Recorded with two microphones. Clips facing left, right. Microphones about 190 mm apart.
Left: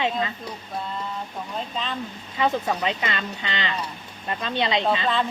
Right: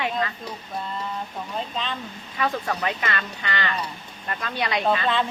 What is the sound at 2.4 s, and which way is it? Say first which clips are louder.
Speech: left 2 dB; 20° left (ahead or behind).